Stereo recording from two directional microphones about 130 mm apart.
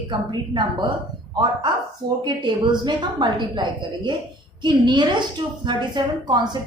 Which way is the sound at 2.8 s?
35° right (ahead or behind).